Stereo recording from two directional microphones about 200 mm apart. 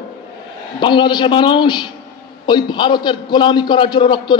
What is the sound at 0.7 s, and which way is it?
A man's voice, 25° left (ahead or behind).